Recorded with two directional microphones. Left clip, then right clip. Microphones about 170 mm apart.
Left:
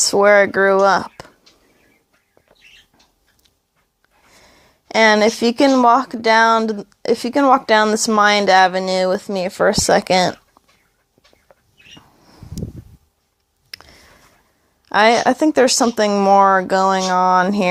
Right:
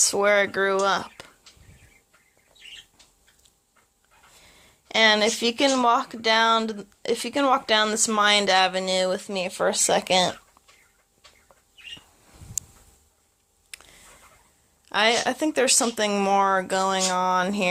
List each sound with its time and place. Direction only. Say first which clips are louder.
0.1 s speech: left 9 dB; 50° left (ahead or behind)
4.4 s speech: left 4 dB; 50° left (ahead or behind)
13.7 s a sound: left 7 dB; 50° left (ahead or behind)
14.8 s speech: left 9 dB; 50° left (ahead or behind)